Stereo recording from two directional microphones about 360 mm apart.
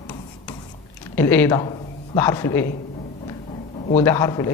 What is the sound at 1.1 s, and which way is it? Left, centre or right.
Speech, centre.